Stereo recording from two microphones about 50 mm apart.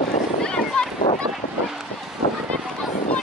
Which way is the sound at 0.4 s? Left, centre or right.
Centre.